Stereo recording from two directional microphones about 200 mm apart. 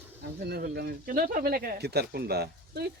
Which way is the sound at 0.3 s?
55° right (ahead or behind).